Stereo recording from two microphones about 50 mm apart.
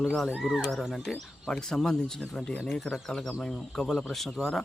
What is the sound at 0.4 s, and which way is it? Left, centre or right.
Speech, centre.